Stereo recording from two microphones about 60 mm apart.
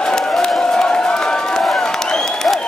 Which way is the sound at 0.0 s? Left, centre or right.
Centre.